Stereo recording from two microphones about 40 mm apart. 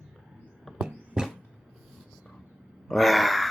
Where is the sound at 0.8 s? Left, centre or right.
Centre.